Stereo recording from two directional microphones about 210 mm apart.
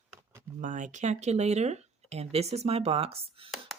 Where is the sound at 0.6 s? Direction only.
35° right (ahead or behind).